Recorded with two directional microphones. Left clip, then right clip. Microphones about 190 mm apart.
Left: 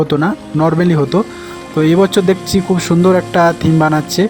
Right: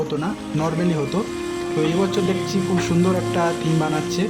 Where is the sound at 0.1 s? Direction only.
35° left (ahead or behind).